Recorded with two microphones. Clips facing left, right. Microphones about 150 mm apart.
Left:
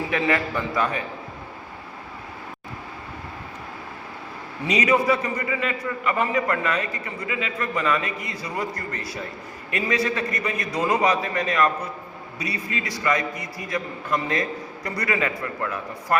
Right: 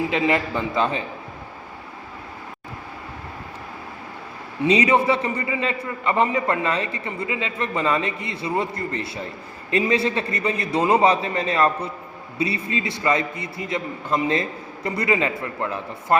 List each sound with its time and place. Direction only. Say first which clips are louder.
0.1 s a man's voice: right 2 dB; 20° right (ahead or behind)
4.6 s a man's voice: right 3 dB; 30° right (ahead or behind)